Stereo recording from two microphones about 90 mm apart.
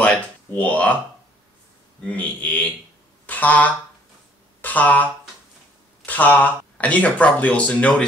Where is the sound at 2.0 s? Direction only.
15° left (ahead or behind).